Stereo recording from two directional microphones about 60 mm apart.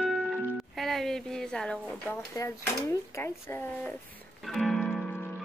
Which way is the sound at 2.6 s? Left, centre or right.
Left.